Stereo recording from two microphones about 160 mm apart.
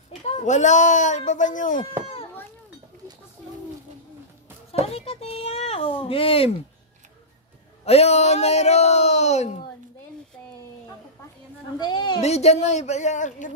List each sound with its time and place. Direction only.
0.4 s speech: 50° left (ahead or behind)
4.7 s a child's voice: 40° left (ahead or behind)
7.8 s speech: 40° left (ahead or behind)
11.8 s a sound: 30° left (ahead or behind)
12.2 s speech: 40° left (ahead or behind)